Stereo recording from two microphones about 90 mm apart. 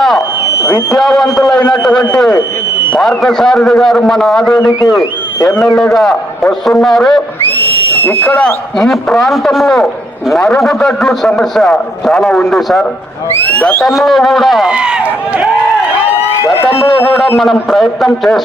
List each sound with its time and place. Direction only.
0.9 s a man's voice: centre (ahead or behind)
5.4 s a man's voice: 35° left (ahead or behind)
5.6 s a man's voice: centre (ahead or behind)
8.2 s speech: 20° left (ahead or behind)
8.4 s a man's voice: 5° left (ahead or behind)
13.4 s speech: 15° left (ahead or behind)
13.8 s a man's voice: centre (ahead or behind)
16.6 s a man's voice: 30° left (ahead or behind)
17.2 s a man's voice: centre (ahead or behind)